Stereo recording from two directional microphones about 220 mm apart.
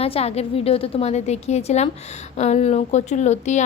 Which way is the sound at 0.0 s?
25° left (ahead or behind).